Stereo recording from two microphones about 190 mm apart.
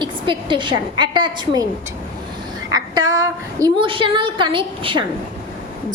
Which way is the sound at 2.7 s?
20° right (ahead or behind).